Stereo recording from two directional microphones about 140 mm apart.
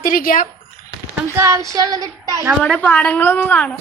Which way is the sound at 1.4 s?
20° right (ahead or behind).